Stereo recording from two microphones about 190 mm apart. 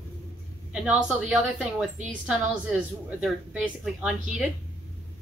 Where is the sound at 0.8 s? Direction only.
5° right (ahead or behind).